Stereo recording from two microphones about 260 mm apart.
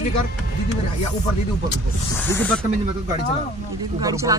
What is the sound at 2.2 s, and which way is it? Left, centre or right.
Speech, centre.